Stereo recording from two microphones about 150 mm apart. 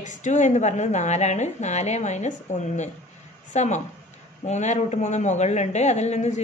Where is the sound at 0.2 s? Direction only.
50° left (ahead or behind).